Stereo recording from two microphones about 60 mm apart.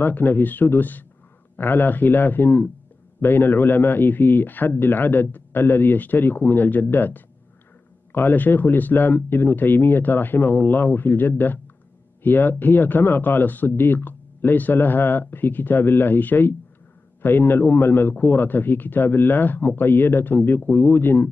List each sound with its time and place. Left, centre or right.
0.0 s speech: left